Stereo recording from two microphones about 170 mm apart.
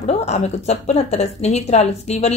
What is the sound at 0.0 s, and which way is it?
A woman's voice, 40° left (ahead or behind).